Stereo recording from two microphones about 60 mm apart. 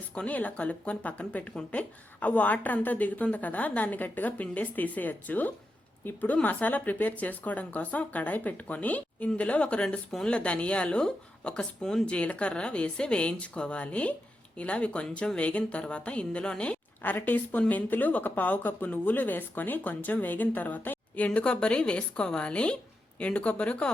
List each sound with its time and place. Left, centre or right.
0.1 s speech: left
17.0 s a woman's voice: left
21.2 s speech: centre